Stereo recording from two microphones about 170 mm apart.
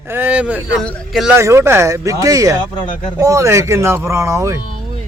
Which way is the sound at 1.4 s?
15° right (ahead or behind).